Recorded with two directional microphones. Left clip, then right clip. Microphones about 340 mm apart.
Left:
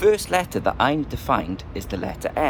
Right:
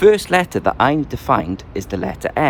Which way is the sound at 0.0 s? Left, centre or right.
Right.